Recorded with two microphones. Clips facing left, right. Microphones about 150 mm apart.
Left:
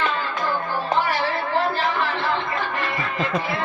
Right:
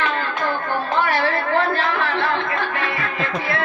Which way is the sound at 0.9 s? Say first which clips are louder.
Right 2 dB; 60° right (ahead or behind).